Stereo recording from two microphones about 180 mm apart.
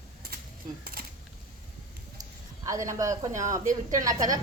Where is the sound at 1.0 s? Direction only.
55° right (ahead or behind).